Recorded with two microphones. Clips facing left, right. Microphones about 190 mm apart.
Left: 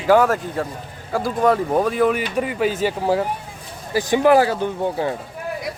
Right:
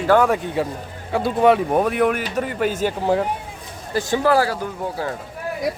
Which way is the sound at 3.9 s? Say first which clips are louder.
Left 3 dB; 15° left (ahead or behind).